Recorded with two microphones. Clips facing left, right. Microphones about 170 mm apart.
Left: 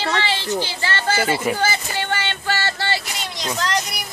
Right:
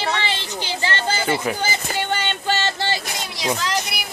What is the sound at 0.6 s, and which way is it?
Speech, 20° right (ahead or behind).